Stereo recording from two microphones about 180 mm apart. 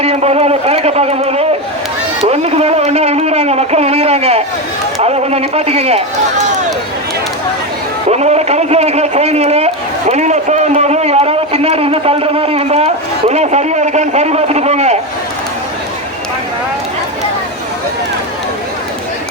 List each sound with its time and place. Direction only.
0.0 s a man's voice: 35° right (ahead or behind)
8.1 s a man's voice: 35° right (ahead or behind)